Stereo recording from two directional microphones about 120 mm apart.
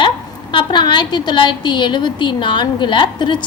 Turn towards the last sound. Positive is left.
turn(degrees=40)  # may be behind; listen again after turning